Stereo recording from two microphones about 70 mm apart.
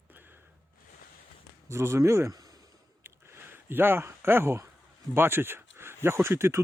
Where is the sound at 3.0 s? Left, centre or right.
Right.